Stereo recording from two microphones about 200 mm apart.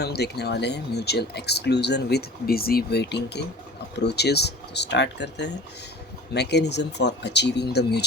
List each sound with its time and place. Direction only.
0.0 s speech: 55° left (ahead or behind)